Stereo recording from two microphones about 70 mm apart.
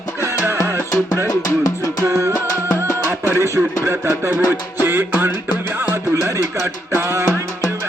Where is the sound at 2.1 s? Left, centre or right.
Right.